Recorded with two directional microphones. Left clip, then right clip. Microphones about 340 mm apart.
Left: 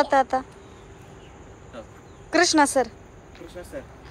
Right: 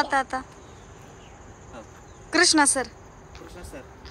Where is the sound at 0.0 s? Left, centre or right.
Centre.